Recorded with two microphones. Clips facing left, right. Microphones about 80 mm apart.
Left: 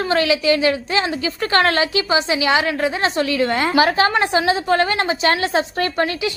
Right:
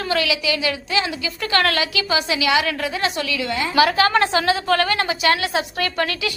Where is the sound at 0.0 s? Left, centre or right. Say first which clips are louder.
Left 4 dB; left.